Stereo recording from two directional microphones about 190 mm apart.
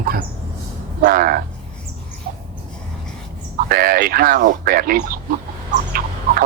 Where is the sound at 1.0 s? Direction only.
50° right (ahead or behind).